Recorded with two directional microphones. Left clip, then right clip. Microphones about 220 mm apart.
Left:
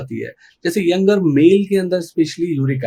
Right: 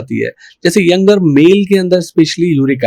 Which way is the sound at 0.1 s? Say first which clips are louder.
Right 10 dB; 35° right (ahead or behind).